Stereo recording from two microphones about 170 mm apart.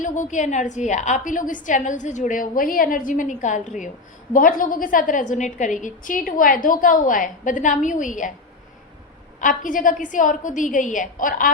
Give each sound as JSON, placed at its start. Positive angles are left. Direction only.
{"t": 0.0, "sound": "a woman's voice", "side_deg": 45}
{"t": 9.4, "sound": "a woman's voice", "side_deg": 50}